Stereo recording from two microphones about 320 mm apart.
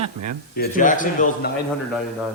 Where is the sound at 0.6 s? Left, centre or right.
Left.